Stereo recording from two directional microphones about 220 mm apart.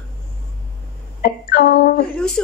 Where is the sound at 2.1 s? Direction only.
5° left (ahead or behind).